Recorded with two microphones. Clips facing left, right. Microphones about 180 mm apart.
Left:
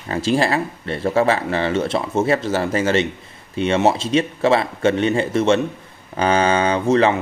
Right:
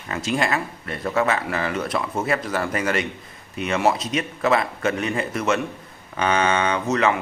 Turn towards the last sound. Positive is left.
turn(degrees=30)  # may be behind; listen again after turning